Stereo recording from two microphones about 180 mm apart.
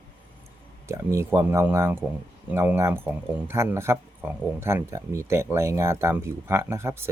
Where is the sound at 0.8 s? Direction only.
15° right (ahead or behind).